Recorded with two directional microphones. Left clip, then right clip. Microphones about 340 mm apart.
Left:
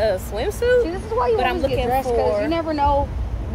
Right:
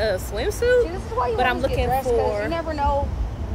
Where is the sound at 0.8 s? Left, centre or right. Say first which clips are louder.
Left 3 dB; left.